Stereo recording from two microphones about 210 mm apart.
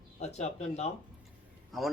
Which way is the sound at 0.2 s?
30° left (ahead or behind).